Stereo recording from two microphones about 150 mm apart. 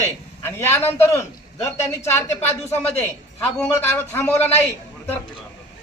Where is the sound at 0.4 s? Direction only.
15° left (ahead or behind).